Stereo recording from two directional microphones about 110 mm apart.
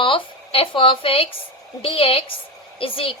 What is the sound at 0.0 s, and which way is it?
A woman's voice, 50° left (ahead or behind).